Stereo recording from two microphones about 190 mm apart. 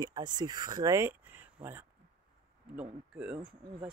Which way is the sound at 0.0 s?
20° right (ahead or behind).